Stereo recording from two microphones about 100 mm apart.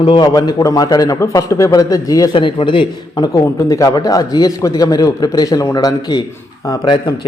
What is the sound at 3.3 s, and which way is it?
A man's voice, 35° left (ahead or behind).